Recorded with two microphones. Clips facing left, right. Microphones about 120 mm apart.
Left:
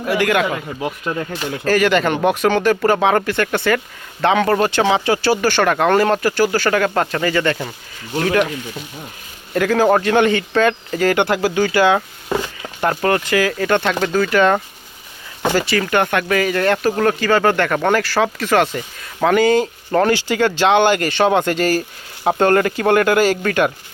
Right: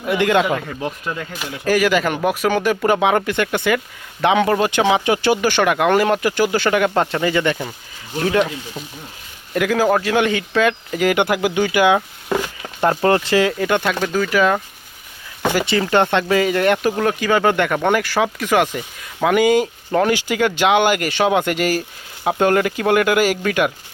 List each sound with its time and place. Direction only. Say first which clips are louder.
0.1 s speech: right 1 dB; 25° right (ahead or behind)
1.0 s speech: left 4 dB; 35° left (ahead or behind)
1.4 s speech: even; 10° right (ahead or behind)
8.2 s speech: even; 25° right (ahead or behind)
9.6 s speech: left 2 dB; 5° right (ahead or behind)
11.9 s a sound: even; centre (ahead or behind)
12.8 s speech: right 2 dB; 20° right (ahead or behind)
13.5 s speech: left 1 dB; 10° right (ahead or behind)
15.6 s speech: right 1 dB; 25° right (ahead or behind); by 23.7 s 5° right (ahead or behind)